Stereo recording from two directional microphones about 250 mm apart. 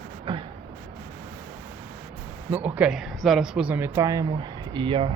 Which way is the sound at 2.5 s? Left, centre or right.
Centre.